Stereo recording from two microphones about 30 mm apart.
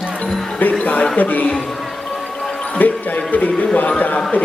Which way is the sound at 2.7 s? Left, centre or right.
Left.